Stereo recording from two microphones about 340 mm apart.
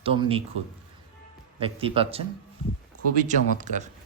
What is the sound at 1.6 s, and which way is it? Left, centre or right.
Speech, centre.